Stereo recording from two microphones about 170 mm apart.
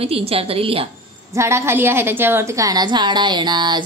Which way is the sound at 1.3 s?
15° right (ahead or behind).